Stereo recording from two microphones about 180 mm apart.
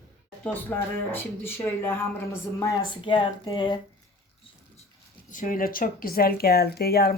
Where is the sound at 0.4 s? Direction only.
10° left (ahead or behind); by 3.8 s 25° left (ahead or behind).